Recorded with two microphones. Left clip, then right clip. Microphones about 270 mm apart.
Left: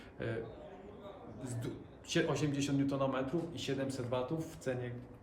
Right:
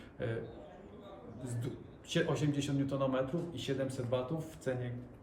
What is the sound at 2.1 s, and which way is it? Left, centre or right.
A man's voice, centre.